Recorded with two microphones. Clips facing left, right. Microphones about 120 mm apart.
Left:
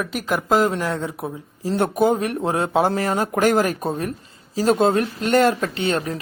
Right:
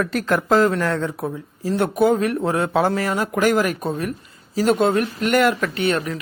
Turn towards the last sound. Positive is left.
turn(degrees=30)  # may be behind; listen again after turning